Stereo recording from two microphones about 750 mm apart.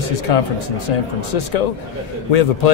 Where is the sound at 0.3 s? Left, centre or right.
Left.